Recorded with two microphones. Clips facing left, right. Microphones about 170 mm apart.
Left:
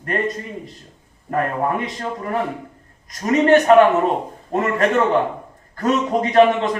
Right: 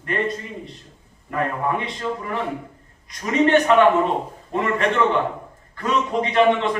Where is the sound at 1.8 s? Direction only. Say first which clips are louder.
Left 1 dB; 45° left (ahead or behind).